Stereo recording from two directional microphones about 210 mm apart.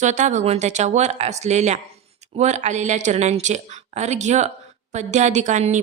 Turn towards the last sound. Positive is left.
turn(degrees=-35)  # may be behind; listen again after turning